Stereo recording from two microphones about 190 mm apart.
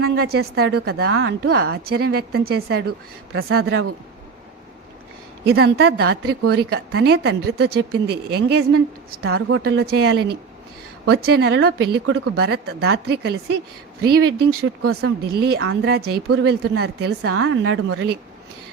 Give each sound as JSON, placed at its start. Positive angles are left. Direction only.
{"t": 0.3, "sound": "speech", "side_deg": -55}
{"t": 1.1, "sound": "speech", "side_deg": -90}
{"t": 1.7, "sound": "speech", "side_deg": -55}
{"t": 3.3, "sound": "speech", "side_deg": -75}
{"t": 5.5, "sound": "speech", "side_deg": -60}